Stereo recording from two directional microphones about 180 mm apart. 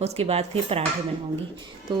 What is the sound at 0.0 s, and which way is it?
Cutlery, 35° right (ahead or behind).